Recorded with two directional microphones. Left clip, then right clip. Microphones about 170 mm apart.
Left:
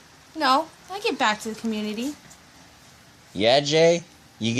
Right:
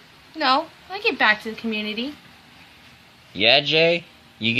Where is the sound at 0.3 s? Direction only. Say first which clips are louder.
Right 1 dB; 10° left (ahead or behind).